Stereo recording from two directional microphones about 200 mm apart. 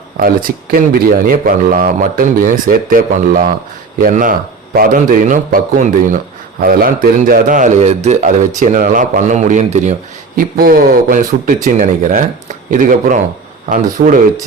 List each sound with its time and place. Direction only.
0.2 s a man's voice: 45° right (ahead or behind)
10.3 s a man's voice: 45° right (ahead or behind)